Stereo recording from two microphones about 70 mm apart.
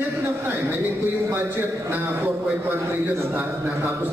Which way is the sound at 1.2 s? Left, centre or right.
Right.